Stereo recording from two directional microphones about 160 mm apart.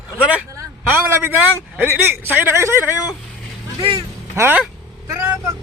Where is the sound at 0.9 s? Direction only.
10° right (ahead or behind).